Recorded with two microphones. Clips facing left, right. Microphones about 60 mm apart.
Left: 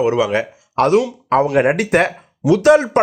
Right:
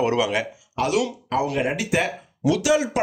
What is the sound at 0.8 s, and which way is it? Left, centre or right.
Speech, left.